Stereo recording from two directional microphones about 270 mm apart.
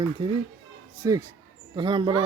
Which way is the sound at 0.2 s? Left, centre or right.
Centre.